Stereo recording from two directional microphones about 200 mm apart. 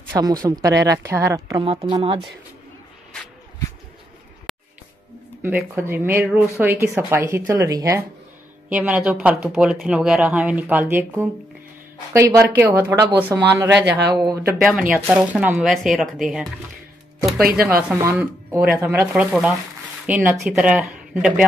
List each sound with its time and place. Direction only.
0.1 s speech: 20° right (ahead or behind)
1.6 s a woman's voice: 25° right (ahead or behind)
4.5 s a sound: centre (ahead or behind)
5.4 s speech: 10° right (ahead or behind)
14.6 s speech: centre (ahead or behind)
17.8 s speech: 5° right (ahead or behind)